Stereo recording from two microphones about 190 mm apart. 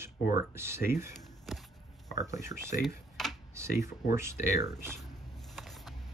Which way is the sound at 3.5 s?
15° right (ahead or behind).